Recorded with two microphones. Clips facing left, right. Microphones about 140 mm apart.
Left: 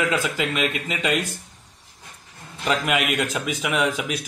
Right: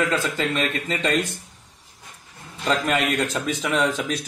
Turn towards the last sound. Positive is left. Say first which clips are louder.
# right 1 dB
turn(degrees=10)  # may be behind; listen again after turning